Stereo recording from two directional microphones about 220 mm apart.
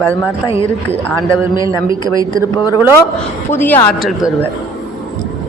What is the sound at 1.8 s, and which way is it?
Speech, 20° left (ahead or behind).